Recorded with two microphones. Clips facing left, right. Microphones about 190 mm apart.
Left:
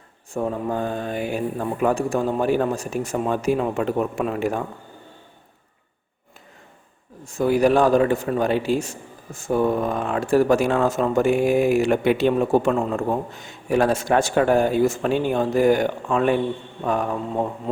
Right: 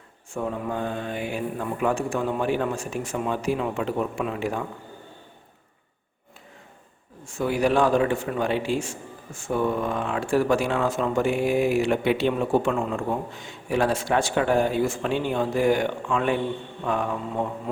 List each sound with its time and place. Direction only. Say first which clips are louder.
0.3 s speech: left 4 dB; 40° left (ahead or behind)
7.3 s a man's voice: left 4 dB; 40° left (ahead or behind)